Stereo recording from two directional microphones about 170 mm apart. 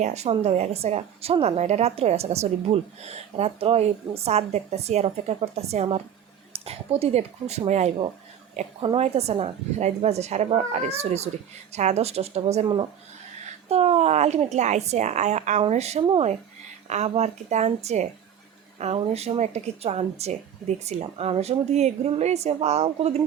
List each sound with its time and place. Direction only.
0.0 s a woman's voice: 40° right (ahead or behind)
13.7 s a woman's voice: 40° right (ahead or behind)